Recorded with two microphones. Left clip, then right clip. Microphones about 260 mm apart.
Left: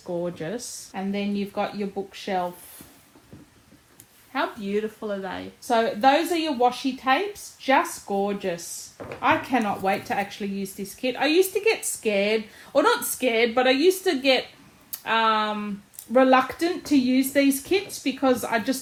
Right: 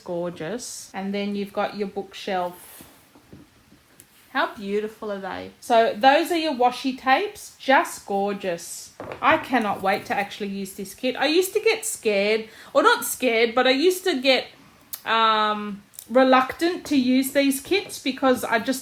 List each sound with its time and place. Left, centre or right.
0.0 s speech: right
4.3 s speech: right
5.6 s speech: right